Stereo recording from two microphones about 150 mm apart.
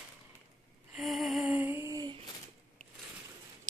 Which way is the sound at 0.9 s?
Centre (ahead or behind).